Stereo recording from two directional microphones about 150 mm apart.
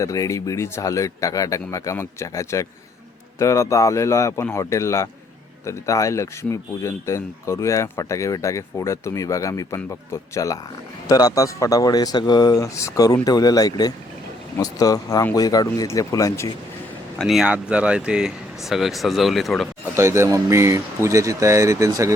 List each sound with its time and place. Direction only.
0.0 s speech: 20° left (ahead or behind)
17.2 s speech: centre (ahead or behind)
20.0 s speech: 20° right (ahead or behind)